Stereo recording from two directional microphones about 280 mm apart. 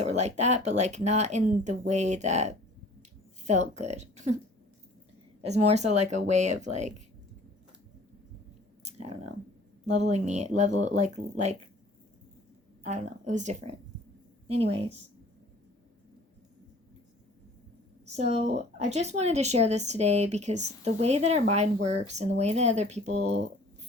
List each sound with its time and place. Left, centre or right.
0.0 s speech: right
5.5 s speech: right
8.8 s a sound: right
9.8 s speech: right
12.8 s a woman's voice: right
18.0 s speech: right